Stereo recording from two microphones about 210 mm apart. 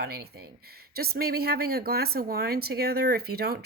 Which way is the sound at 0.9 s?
45° right (ahead or behind).